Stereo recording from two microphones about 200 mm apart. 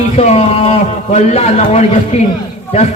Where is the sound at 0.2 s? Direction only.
30° left (ahead or behind).